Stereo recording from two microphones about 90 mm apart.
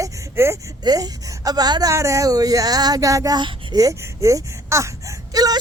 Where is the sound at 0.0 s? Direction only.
30° right (ahead or behind).